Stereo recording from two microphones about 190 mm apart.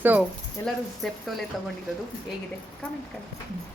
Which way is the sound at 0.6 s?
15° left (ahead or behind).